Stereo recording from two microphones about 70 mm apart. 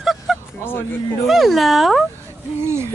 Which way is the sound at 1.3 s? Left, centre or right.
Centre.